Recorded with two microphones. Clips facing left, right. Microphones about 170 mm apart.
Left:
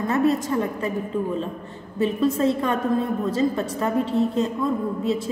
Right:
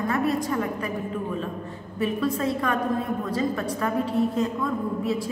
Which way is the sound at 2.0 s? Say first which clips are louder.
Left 4 dB; 25° left (ahead or behind).